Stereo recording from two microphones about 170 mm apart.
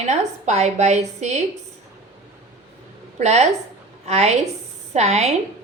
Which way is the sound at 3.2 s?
40° right (ahead or behind).